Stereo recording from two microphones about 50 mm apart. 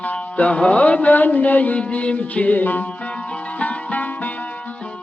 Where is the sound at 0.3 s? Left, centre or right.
Left.